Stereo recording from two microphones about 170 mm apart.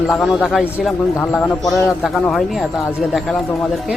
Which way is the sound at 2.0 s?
Centre (ahead or behind).